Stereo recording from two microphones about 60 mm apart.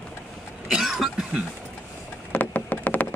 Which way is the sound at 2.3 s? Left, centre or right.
Left.